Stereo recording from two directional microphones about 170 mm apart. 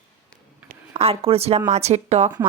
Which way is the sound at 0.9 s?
35° right (ahead or behind).